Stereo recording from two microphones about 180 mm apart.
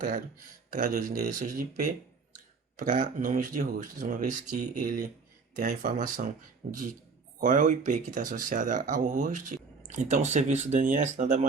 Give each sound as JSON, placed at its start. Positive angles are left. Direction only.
{"t": 0.7, "sound": "speech", "side_deg": -45}